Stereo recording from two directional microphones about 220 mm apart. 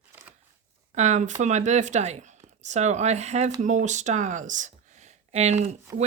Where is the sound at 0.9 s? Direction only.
30° right (ahead or behind).